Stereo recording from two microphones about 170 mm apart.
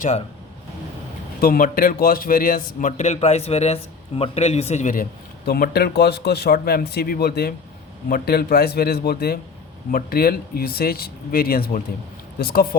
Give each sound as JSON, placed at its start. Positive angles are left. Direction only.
{"t": 1.4, "sound": "a man's voice", "side_deg": 60}
{"t": 5.5, "sound": "a man's voice", "side_deg": 65}